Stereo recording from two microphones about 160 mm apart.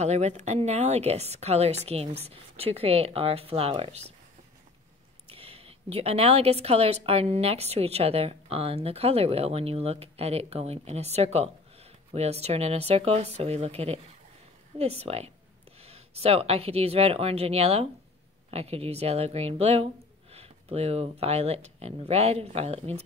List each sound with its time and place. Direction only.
0.0 s a woman's voice: 45° right (ahead or behind)
5.3 s a woman's voice: 35° right (ahead or behind)